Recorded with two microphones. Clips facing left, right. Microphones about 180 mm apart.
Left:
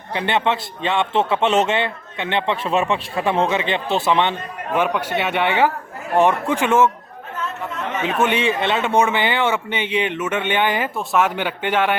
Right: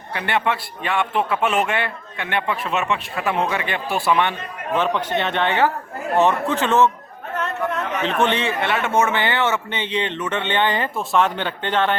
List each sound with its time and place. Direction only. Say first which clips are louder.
0.1 s a man's voice: left 2 dB; 25° left (ahead or behind)
8.0 s a man's voice: left 2 dB; 10° left (ahead or behind)